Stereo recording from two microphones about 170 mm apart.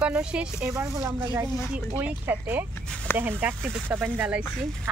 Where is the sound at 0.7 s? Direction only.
15° right (ahead or behind).